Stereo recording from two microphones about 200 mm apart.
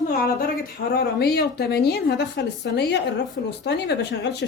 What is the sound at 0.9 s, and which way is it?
A woman's voice, 50° left (ahead or behind).